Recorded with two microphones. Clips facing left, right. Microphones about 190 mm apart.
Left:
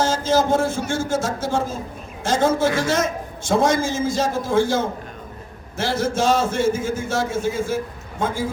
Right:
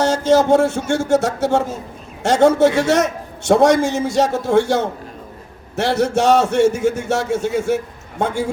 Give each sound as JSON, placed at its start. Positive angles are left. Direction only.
{"t": 0.0, "sound": "a man's voice", "side_deg": -65}